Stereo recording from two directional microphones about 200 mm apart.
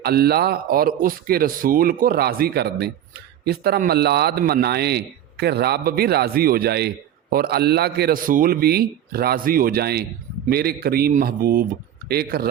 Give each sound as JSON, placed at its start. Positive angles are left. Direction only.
{"t": 0.0, "sound": "a man's voice", "side_deg": -50}